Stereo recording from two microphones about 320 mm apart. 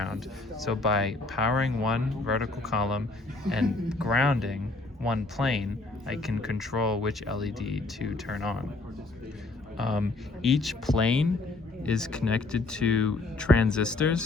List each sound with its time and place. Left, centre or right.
0.0 s speech: centre
9.7 s speech: centre